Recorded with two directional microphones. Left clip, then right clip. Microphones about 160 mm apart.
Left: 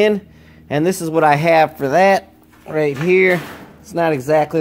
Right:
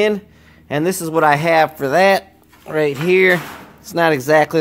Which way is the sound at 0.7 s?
Centre (ahead or behind).